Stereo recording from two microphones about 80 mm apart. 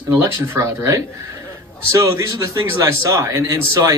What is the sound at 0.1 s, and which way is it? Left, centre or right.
A man's voice, right.